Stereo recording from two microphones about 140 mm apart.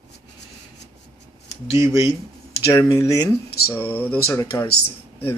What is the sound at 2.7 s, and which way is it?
Speech, 20° left (ahead or behind).